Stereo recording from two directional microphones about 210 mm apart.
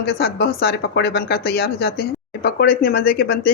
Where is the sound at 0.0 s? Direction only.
50° left (ahead or behind).